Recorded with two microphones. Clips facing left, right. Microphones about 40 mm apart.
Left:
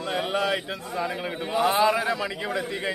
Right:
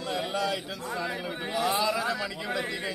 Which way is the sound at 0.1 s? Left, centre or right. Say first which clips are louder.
Left 4 dB; left.